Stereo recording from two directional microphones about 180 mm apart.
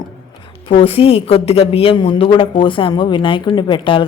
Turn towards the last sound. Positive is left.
turn(degrees=30)  # may be behind; listen again after turning